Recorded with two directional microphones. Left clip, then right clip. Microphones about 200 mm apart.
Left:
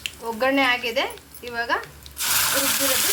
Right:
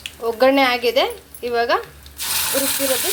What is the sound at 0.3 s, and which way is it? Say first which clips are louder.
A woman's voice: right 5 dB; 40° right (ahead or behind).